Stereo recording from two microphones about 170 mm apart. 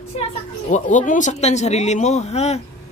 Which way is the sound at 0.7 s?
50° left (ahead or behind).